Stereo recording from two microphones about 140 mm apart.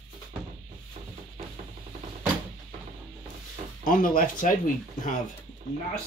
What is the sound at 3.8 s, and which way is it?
Speech, 75° left (ahead or behind).